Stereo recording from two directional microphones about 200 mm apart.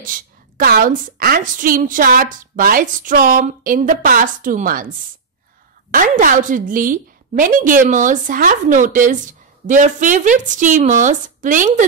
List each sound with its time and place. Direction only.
0.0 s a woman's voice: 45° right (ahead or behind)